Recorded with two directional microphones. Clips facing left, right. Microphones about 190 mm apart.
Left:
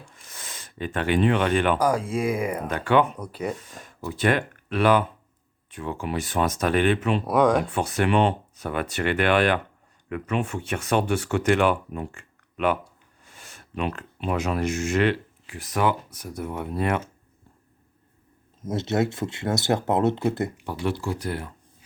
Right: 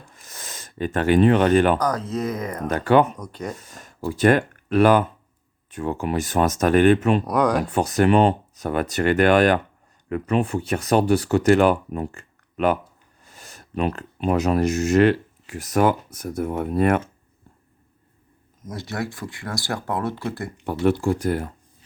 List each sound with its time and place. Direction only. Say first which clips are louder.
0.2 s speech: right 4 dB; 40° right (ahead or behind)
1.8 s speech: left 1 dB; 10° left (ahead or behind)
2.6 s speech: right 5 dB; 40° right (ahead or behind)
3.2 s speech: left 2 dB; 5° left (ahead or behind)
3.6 s speech: right 5 dB; 45° right (ahead or behind)
7.3 s speech: left 1 dB; centre (ahead or behind)
7.7 s speech: right 5 dB; 40° right (ahead or behind)
18.6 s speech: left 5 dB; 25° left (ahead or behind)
20.8 s speech: right 8 dB; 50° right (ahead or behind)